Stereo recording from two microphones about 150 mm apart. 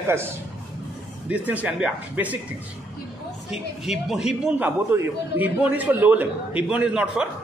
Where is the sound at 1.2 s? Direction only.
10° right (ahead or behind).